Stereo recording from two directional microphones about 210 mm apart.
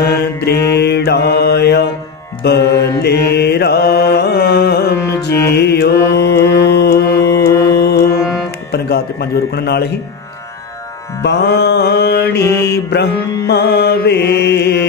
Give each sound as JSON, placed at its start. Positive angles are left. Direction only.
{"t": 0.1, "sound": "music", "side_deg": 50}
{"t": 2.4, "sound": "mantra", "side_deg": 50}
{"t": 7.4, "sound": "mantra", "side_deg": 15}
{"t": 7.7, "sound": "music", "side_deg": 50}
{"t": 8.7, "sound": "a sound", "side_deg": 50}
{"t": 11.2, "sound": "music", "side_deg": 55}